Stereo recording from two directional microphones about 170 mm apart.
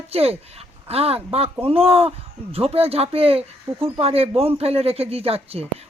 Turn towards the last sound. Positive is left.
turn(degrees=-35)  # may be behind; listen again after turning